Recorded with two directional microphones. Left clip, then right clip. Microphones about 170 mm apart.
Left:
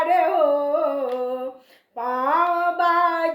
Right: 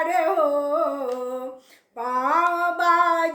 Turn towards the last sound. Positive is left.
turn(degrees=-25)  # may be behind; listen again after turning